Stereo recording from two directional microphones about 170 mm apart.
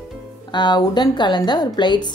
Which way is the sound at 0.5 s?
25° left (ahead or behind).